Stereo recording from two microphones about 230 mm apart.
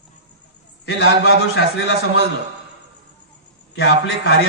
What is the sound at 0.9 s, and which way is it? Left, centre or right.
Speech, left.